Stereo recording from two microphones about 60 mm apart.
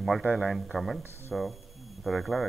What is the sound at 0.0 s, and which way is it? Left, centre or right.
Speech, centre.